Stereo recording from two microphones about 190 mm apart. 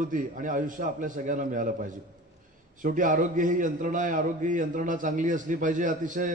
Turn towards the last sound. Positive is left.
turn(degrees=-40)  # may be behind; listen again after turning